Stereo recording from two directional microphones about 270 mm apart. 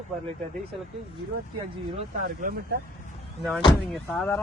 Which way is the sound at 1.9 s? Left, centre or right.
Right.